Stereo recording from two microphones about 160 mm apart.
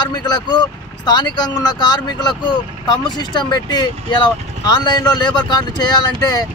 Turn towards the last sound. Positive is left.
turn(degrees=25)  # may be behind; listen again after turning